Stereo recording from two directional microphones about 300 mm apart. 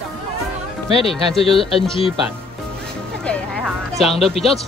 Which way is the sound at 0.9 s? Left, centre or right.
Centre.